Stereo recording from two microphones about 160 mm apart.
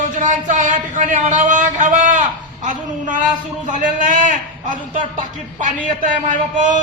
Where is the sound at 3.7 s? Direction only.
55° right (ahead or behind).